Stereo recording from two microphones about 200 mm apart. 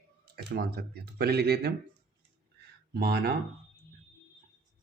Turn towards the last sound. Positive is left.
turn(degrees=-50)  # may be behind; listen again after turning